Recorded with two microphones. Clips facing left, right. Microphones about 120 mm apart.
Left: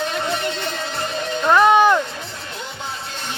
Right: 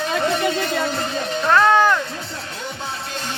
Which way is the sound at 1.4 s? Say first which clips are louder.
Left 2 dB; 15° left (ahead or behind).